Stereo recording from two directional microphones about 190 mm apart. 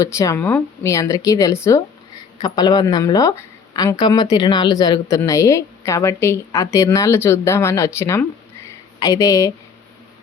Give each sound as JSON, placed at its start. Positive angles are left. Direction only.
{"t": 0.0, "sound": "a woman's voice", "side_deg": 15}